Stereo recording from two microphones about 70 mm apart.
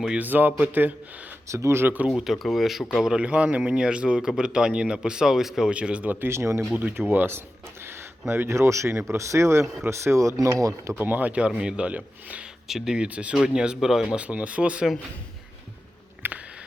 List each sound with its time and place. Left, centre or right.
0.2 s speech: right
1.5 s speech: right
2.0 s a man's voice: centre; by 6.7 s right
6.7 s speech: right
10.9 s speech: right
12.6 s a man's voice: centre
16.2 s a sound: right